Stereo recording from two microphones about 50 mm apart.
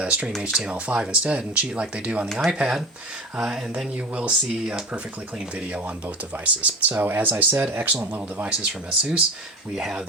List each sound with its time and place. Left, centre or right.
0.0 s speech: right
2.5 s a sound: centre
4.1 s speech: right
6.4 s speech: right
8.4 s speech: centre
9.7 s a sound: centre